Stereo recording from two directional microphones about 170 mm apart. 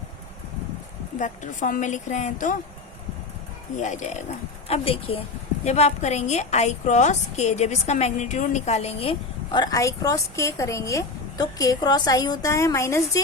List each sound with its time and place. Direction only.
1.2 s a woman's voice: 45° left (ahead or behind)
3.8 s a woman's voice: 45° left (ahead or behind)
4.7 s a woman's voice: 35° left (ahead or behind); by 13.2 s 15° left (ahead or behind)